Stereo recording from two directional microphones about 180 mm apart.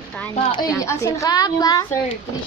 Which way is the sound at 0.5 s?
20° left (ahead or behind).